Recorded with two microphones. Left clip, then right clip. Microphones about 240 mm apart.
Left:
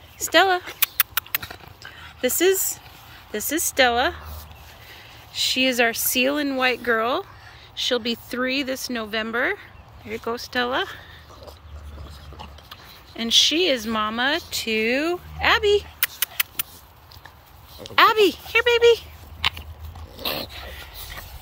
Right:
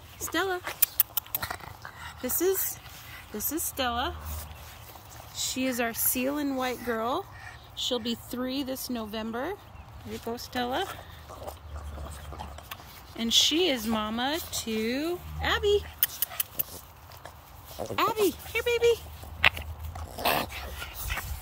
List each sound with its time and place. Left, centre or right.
0.2 s speech: centre
1.3 s a sound: centre
3.3 s speech: centre
3.7 s speech: centre
5.3 s speech: centre
13.1 s speech: centre
17.9 s speech: centre
20.2 s dog: centre